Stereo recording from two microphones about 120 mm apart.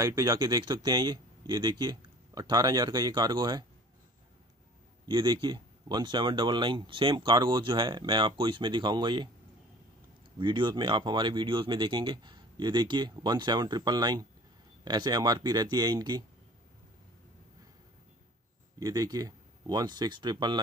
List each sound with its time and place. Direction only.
0.0 s speech: 30° right (ahead or behind)
5.0 s speech: 40° right (ahead or behind)
10.4 s speech: 40° right (ahead or behind)
18.8 s speech: 30° right (ahead or behind)